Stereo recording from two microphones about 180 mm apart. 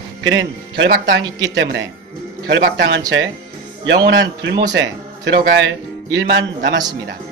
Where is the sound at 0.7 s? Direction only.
80° right.